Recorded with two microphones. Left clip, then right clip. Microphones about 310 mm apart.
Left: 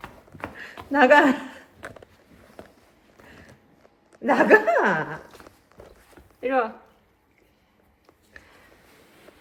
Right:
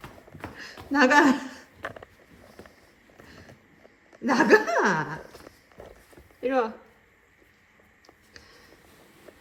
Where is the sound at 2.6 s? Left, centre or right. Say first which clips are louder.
Left 4 dB; centre.